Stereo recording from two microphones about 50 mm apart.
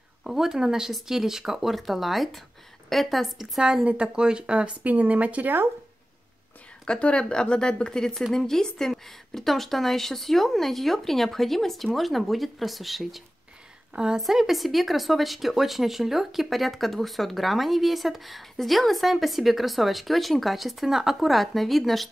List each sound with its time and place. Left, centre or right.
0.2 s speech: centre
3.8 s speech: right
6.9 s speech: centre
13.9 s speech: centre
14.2 s speech: centre